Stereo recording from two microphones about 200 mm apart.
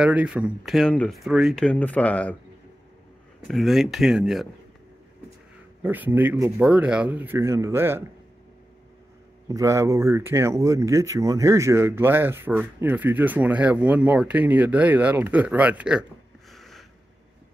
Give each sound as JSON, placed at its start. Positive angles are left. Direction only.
{"t": 0.0, "sound": "speech", "side_deg": -5}
{"t": 3.4, "sound": "speech", "side_deg": 0}
{"t": 5.8, "sound": "speech", "side_deg": -10}
{"t": 9.5, "sound": "speech", "side_deg": -15}
{"t": 16.5, "sound": "a sound", "side_deg": 0}